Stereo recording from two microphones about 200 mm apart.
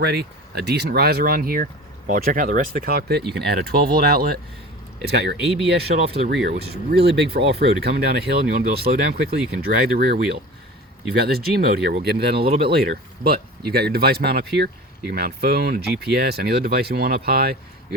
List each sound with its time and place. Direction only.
0.0 s speech: 55° right (ahead or behind)
5.9 s speech: 40° right (ahead or behind)
6.3 s speech: 55° right (ahead or behind)
12.4 s speech: 25° right (ahead or behind)
12.7 s speech: 50° right (ahead or behind)